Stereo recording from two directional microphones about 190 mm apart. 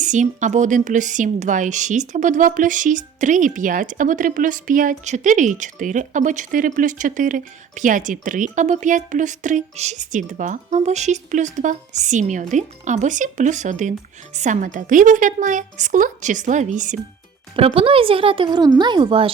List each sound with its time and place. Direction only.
0.0 s a woman's voice: 40° right (ahead or behind)
17.6 s speech: 30° right (ahead or behind)